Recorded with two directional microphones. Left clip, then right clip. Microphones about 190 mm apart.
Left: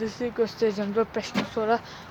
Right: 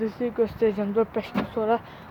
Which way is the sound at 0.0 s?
10° right (ahead or behind).